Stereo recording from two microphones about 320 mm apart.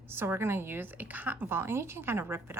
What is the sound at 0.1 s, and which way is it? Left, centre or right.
A woman's voice, centre.